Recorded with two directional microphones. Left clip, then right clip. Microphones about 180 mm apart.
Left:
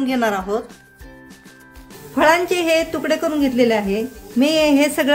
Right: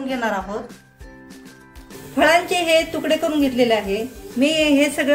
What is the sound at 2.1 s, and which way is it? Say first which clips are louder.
A woman's voice: left 1 dB; 50° left (ahead or behind).